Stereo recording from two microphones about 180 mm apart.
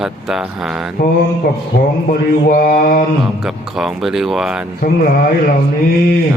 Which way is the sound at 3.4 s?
Centre (ahead or behind).